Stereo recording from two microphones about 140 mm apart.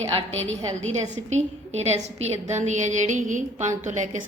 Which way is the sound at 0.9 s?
55° right (ahead or behind).